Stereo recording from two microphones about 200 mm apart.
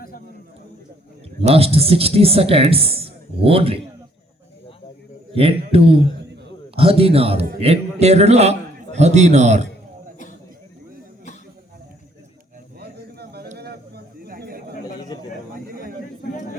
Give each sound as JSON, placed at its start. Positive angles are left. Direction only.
{"t": 1.5, "sound": "a woman's voice", "side_deg": -30}
{"t": 5.3, "sound": "a woman's voice", "side_deg": -30}
{"t": 12.8, "sound": "a sound", "side_deg": -55}